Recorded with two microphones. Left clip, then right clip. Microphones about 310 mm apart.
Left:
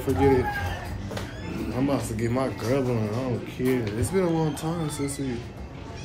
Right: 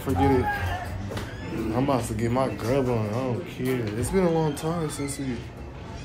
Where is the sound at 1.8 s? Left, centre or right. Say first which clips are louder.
Left 1 dB; centre.